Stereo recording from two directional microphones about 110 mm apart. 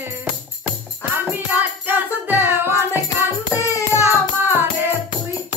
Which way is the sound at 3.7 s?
30° left (ahead or behind).